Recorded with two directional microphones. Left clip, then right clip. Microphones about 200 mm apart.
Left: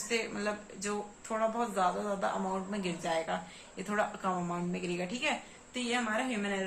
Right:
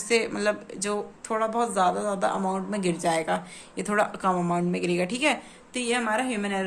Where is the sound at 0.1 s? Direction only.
50° right (ahead or behind).